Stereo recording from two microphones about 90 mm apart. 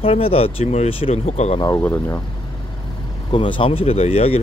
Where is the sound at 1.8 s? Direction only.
25° left (ahead or behind).